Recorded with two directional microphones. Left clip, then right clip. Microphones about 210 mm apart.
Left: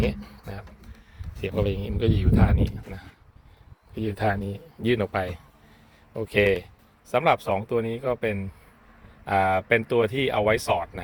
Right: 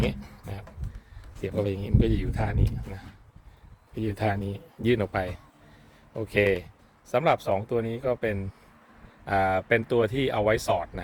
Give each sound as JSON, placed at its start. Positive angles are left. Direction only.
{"t": 0.0, "sound": "a sound", "side_deg": -10}
{"t": 1.4, "sound": "speech", "side_deg": -5}
{"t": 3.9, "sound": "speech", "side_deg": -10}